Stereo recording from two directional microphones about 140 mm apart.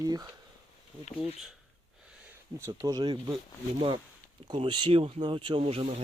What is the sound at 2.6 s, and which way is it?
Speech, 25° right (ahead or behind).